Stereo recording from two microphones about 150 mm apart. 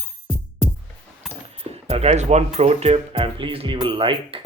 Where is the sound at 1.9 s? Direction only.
45° right (ahead or behind).